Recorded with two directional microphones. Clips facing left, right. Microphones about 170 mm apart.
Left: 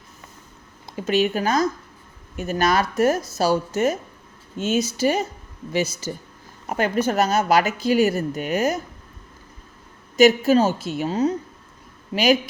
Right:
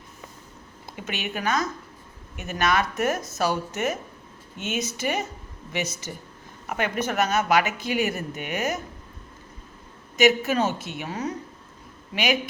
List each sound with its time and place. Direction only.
0.9 s speech: 35° left (ahead or behind)
10.2 s speech: 35° left (ahead or behind)